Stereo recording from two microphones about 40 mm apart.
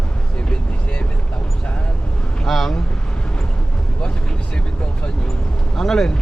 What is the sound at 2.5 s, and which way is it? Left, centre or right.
Vehicle, centre.